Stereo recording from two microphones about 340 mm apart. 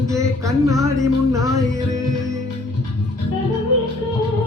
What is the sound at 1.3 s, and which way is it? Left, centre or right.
Music, centre.